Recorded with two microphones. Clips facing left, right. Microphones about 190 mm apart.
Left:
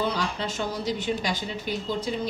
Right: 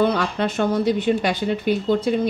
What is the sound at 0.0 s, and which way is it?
Speech, 60° right (ahead or behind).